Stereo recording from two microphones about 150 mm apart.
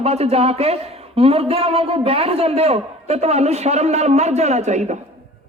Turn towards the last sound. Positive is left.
turn(degrees=-50)  # may be behind; listen again after turning